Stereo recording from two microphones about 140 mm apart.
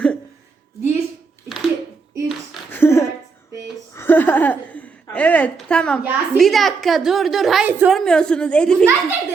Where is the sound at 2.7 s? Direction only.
15° left (ahead or behind).